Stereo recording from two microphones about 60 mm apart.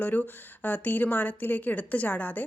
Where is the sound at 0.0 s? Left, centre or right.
Left.